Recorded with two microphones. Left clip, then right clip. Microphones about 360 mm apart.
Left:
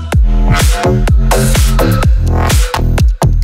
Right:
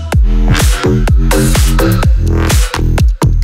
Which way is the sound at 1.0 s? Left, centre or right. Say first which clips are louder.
Even; centre.